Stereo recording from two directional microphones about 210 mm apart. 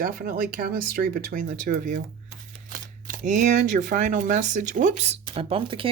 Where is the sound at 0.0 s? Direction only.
45° right (ahead or behind).